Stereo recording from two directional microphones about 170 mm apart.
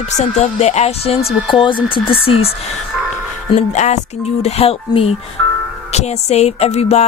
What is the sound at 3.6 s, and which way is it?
Music, 45° left (ahead or behind).